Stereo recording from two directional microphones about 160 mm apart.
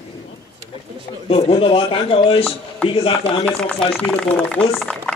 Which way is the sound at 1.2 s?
35° left (ahead or behind).